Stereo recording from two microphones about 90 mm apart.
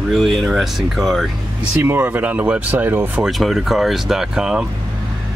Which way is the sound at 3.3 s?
Centre (ahead or behind).